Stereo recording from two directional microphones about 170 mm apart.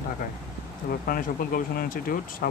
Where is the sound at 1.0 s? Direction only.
60° left (ahead or behind).